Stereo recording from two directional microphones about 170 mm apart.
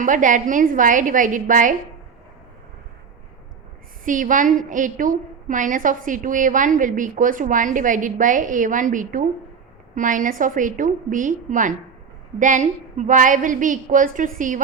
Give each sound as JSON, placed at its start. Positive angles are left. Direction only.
{"t": 0.0, "sound": "a woman's voice", "side_deg": -50}
{"t": 4.0, "sound": "a woman's voice", "side_deg": -50}